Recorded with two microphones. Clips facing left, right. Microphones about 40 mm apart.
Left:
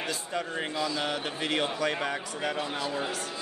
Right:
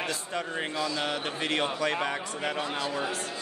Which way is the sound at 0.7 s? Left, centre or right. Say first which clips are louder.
Even; centre.